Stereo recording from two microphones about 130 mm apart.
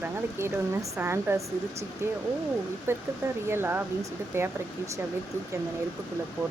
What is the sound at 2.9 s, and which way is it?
Speech, 15° right (ahead or behind).